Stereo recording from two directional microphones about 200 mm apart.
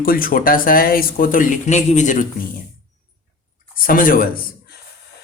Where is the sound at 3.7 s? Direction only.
45° left (ahead or behind).